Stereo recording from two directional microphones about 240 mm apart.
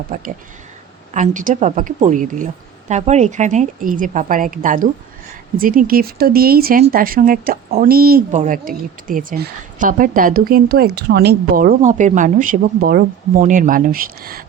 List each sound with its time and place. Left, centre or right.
0.1 s speech: right